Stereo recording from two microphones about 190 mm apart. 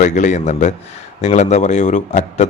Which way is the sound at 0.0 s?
40° left (ahead or behind).